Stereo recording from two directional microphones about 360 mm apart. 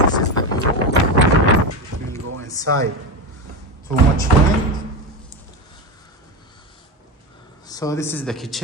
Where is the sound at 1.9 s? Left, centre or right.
Right.